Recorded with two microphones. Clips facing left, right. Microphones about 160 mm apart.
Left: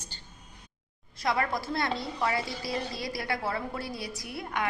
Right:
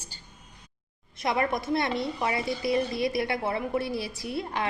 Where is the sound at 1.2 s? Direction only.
20° right (ahead or behind).